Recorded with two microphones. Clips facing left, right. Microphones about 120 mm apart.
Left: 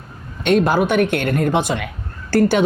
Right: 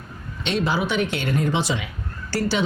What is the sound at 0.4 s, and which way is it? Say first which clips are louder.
A woman's voice: left 8 dB; 50° left (ahead or behind).